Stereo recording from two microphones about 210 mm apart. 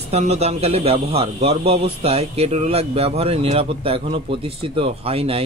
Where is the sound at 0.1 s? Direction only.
30° right (ahead or behind).